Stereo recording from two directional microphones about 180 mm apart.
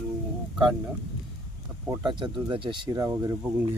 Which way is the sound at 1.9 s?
25° right (ahead or behind).